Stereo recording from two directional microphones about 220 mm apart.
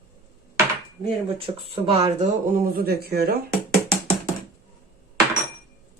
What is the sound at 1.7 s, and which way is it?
Speech, 25° right (ahead or behind).